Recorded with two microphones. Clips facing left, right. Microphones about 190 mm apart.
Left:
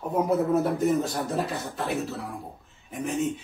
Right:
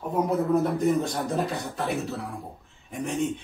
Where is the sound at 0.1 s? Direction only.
Centre (ahead or behind).